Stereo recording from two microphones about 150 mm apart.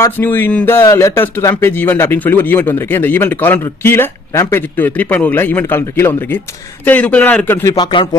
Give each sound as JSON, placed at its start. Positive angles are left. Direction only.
{"t": 0.0, "sound": "speech", "side_deg": 15}
{"t": 7.7, "sound": "speech", "side_deg": 30}